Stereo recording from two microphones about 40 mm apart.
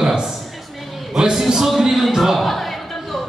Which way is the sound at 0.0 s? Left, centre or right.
Centre.